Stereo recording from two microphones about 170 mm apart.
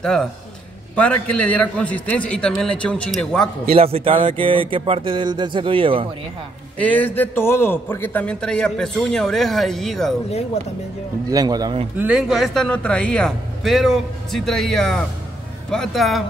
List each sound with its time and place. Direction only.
0.0 s a man's voice: 5° left (ahead or behind)
3.7 s speech: 35° right (ahead or behind)
6.8 s a man's voice: 10° left (ahead or behind)
11.2 s a man's voice: 20° right (ahead or behind)
12.0 s a man's voice: 5° right (ahead or behind)